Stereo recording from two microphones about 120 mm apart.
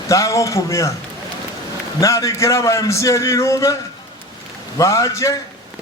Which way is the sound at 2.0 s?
25° left (ahead or behind).